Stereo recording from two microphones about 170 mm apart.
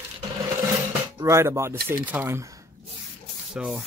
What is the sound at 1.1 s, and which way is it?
Speech, 15° right (ahead or behind).